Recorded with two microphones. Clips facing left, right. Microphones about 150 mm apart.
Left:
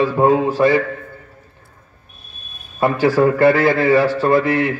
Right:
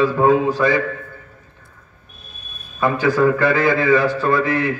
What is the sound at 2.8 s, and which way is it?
A man's voice, 30° left (ahead or behind).